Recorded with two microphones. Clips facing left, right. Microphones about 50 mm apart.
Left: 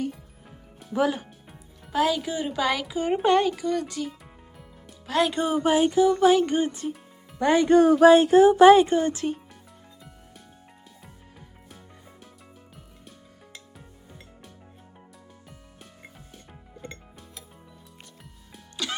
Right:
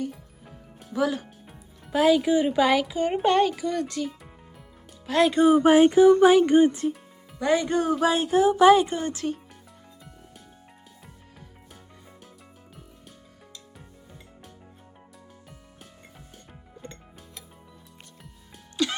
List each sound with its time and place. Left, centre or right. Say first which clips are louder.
0.9 s speech: left 1 dB; left
1.9 s speech: right 5 dB; centre
2.8 s speech: even; centre
5.6 s speech: right 3 dB; right
6.7 s speech: right 5 dB; centre
7.3 s speech: left 5 dB; left
9.2 s speech: left 1 dB; left
18.8 s music: right 6 dB; centre